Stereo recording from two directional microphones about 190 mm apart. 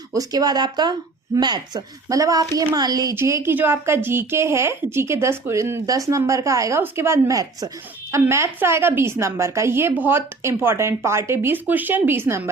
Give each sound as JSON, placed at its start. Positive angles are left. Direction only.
{"t": 0.1, "sound": "speech", "side_deg": -20}